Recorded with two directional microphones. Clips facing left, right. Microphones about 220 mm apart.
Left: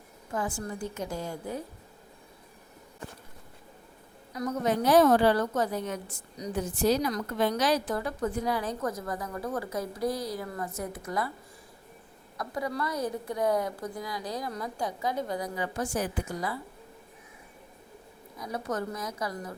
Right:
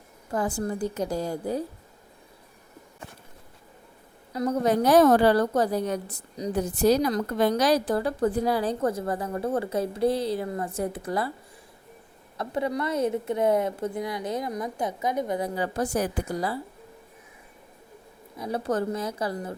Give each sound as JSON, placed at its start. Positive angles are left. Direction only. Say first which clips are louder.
{"t": 0.3, "sound": "a woman's voice", "louder": "right 5 dB", "side_deg": -35}
{"t": 4.4, "sound": "a woman's voice", "louder": "right 5 dB", "side_deg": -30}
{"t": 12.4, "sound": "a woman's voice", "louder": "right 5 dB", "side_deg": -25}
{"t": 18.3, "sound": "a woman's voice", "louder": "right 6 dB", "side_deg": -30}